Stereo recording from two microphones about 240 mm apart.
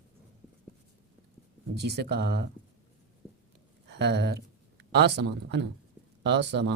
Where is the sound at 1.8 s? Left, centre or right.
Right.